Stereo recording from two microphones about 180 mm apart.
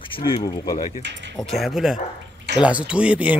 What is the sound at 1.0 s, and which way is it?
Speech, 80° right.